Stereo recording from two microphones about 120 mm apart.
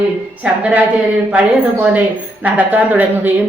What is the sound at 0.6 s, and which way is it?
A woman's voice, 10° right (ahead or behind).